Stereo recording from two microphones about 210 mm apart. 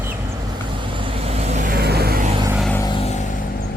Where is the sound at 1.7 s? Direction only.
50° right (ahead or behind).